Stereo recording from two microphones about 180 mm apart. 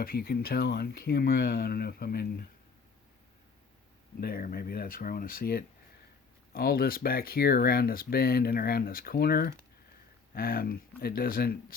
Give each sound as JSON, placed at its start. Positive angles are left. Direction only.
{"t": 0.0, "sound": "speech", "side_deg": 55}
{"t": 4.2, "sound": "speech", "side_deg": 60}